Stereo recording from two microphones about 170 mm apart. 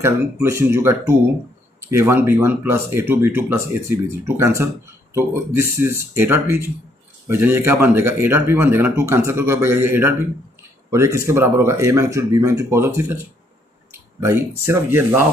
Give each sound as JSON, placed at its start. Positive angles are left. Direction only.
{"t": 0.0, "sound": "speech", "side_deg": -15}
{"t": 14.2, "sound": "speech", "side_deg": -15}